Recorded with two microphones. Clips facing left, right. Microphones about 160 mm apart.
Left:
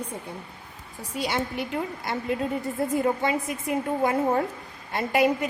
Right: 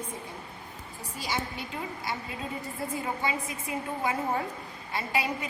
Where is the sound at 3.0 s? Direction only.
50° left (ahead or behind).